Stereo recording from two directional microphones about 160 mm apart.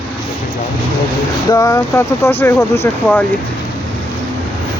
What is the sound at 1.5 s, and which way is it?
Speech, 20° left (ahead or behind).